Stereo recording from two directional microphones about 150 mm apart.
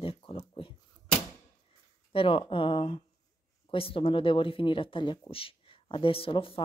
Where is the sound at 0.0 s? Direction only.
35° left (ahead or behind).